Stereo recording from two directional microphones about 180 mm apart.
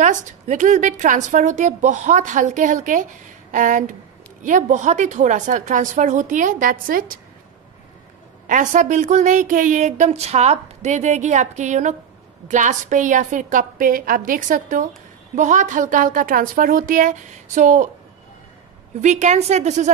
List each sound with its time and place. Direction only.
0.0 s a woman's voice: 45° right (ahead or behind)
8.5 s a woman's voice: 45° right (ahead or behind)
18.9 s a woman's voice: 40° right (ahead or behind)